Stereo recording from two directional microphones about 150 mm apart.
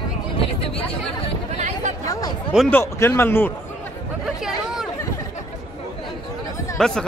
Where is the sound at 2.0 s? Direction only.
20° left (ahead or behind).